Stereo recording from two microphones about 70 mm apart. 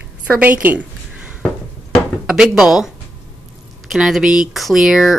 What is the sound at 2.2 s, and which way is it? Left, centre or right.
Speech, centre.